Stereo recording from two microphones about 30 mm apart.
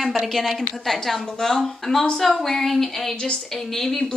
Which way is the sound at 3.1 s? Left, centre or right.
Left.